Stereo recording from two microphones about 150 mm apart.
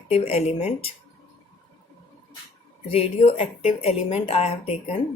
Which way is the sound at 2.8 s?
40° left (ahead or behind).